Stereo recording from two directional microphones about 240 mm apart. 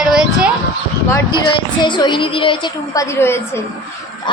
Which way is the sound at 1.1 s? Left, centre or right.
Centre.